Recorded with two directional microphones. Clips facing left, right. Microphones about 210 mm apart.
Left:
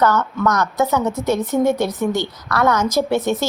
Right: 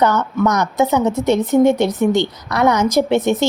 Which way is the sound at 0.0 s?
15° right (ahead or behind).